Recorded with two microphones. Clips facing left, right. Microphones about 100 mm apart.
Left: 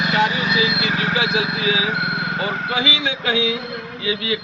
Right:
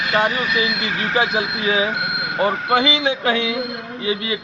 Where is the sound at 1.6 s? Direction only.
45° right (ahead or behind).